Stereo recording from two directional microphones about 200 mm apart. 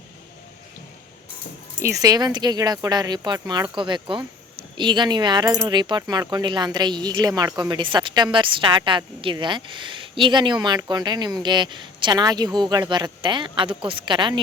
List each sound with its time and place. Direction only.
1.8 s a woman's voice: 15° right (ahead or behind)